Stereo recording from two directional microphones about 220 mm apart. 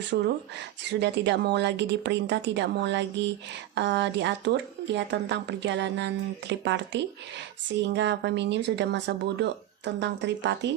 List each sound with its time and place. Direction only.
0.1 s speech: 50° right (ahead or behind)